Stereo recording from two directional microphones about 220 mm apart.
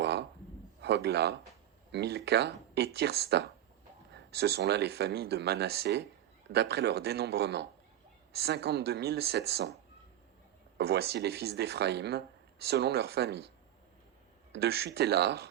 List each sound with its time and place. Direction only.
0.0 s a sound: 50° right (ahead or behind)
0.8 s a man's voice: 50° right (ahead or behind)
10.8 s speech: 45° right (ahead or behind)
14.5 s speech: 50° right (ahead or behind)